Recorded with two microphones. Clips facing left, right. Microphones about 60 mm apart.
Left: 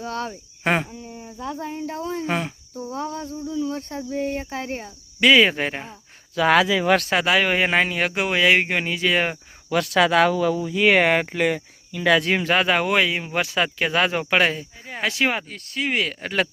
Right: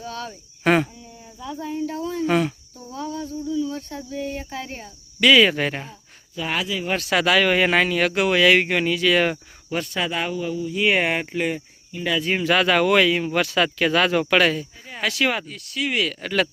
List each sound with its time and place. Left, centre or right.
0.0 s cricket: left
0.6 s speech: centre
1.0 s speech: left
1.7 s cricket: left
2.7 s cricket: left
6.3 s speech: left
7.1 s speech: left
9.6 s speech: left
12.5 s speech: left
15.4 s cricket: left